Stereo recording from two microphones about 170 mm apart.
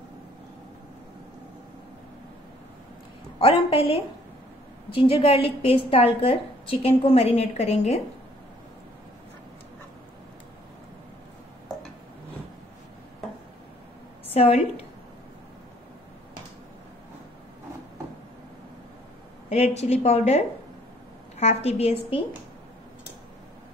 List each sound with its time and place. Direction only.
3.3 s a woman's voice: 35° left (ahead or behind)
14.3 s a woman's voice: 35° left (ahead or behind)
19.5 s a woman's voice: 40° left (ahead or behind)